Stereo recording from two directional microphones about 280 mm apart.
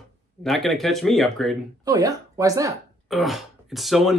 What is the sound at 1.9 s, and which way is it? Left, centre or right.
Speech, centre.